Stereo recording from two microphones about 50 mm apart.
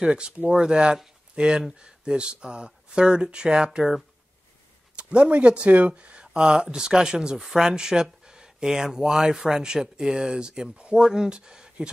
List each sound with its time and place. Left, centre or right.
0.0 s speech: centre
4.9 s speech: right